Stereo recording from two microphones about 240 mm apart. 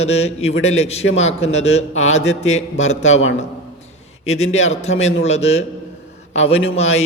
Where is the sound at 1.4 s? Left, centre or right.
Left.